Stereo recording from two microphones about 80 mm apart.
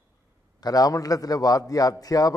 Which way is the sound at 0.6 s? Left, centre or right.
Left.